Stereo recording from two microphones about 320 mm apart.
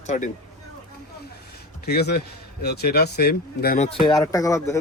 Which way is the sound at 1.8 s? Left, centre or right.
Left.